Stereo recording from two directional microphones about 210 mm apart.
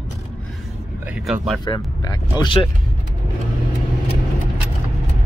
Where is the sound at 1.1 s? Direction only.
Centre (ahead or behind).